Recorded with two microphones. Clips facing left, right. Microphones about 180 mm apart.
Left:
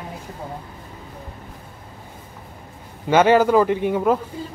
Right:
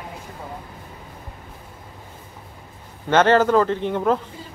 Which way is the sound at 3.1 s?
10° left (ahead or behind).